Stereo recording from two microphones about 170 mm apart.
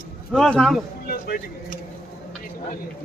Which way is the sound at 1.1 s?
60° left (ahead or behind).